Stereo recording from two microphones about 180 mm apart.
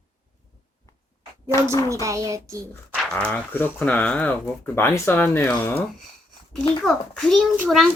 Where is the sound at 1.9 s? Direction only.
15° right (ahead or behind).